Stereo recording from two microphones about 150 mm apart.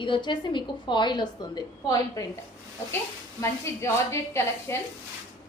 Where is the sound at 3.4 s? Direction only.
20° left (ahead or behind).